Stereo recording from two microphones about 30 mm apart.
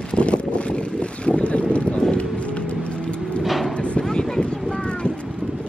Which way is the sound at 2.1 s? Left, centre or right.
Left.